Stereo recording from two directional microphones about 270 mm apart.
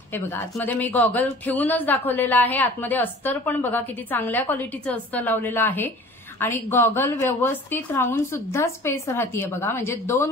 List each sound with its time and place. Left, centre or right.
0.1 s a woman's voice: centre